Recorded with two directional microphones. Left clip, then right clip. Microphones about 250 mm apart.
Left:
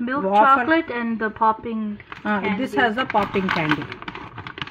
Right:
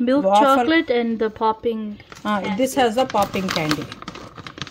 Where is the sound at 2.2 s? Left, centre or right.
Right.